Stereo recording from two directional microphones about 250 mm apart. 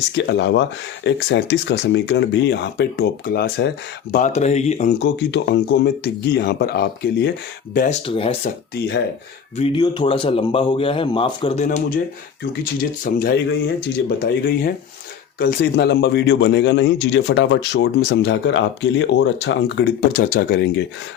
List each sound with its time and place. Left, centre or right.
0.2 s speech: left
8.0 s speech: left
9.6 s speech: left
13.1 s speech: left